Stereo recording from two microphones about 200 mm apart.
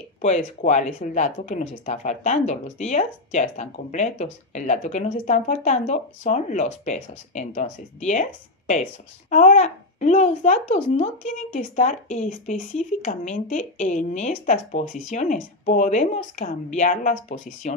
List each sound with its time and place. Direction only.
0.2 s speech: 40° left (ahead or behind)